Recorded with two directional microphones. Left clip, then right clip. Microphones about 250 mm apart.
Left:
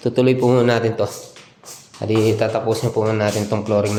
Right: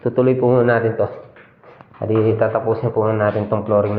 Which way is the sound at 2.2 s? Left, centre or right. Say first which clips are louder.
Right 1 dB; left.